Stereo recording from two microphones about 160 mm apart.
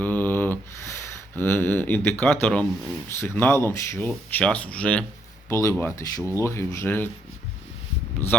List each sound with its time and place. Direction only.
0.0 s a sound: 10° left (ahead or behind)
2.4 s speech: 5° left (ahead or behind)
5.5 s speech: 20° left (ahead or behind)